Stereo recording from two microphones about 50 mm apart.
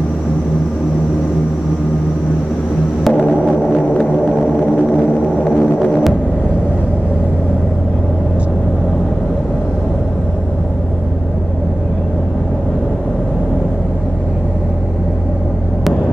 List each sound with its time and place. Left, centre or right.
3.1 s music: left
4.0 s a sound: centre
5.4 s hum: centre